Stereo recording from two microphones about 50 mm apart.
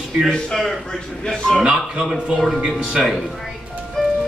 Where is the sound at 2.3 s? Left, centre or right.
Centre.